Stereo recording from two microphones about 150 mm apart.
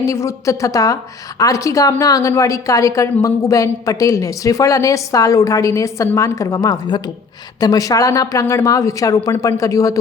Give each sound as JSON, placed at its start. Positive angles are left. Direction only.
{"t": 0.0, "sound": "a woman's voice", "side_deg": 20}